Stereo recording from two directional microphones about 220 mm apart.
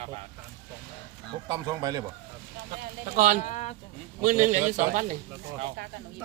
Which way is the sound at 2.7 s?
35° right (ahead or behind).